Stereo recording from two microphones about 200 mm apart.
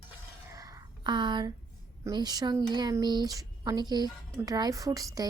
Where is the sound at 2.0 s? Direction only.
20° right (ahead or behind).